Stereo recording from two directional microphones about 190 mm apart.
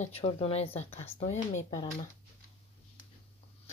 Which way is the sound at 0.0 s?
35° left (ahead or behind).